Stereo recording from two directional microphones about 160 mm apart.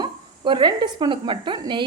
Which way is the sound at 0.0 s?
30° right (ahead or behind).